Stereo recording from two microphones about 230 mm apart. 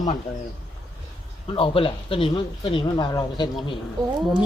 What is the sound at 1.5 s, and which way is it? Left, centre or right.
Speech, left.